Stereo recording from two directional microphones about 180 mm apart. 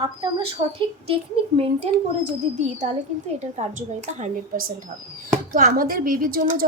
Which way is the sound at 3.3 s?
40° right (ahead or behind).